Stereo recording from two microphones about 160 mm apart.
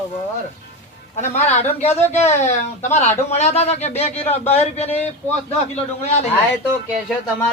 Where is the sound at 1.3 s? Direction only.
45° left (ahead or behind).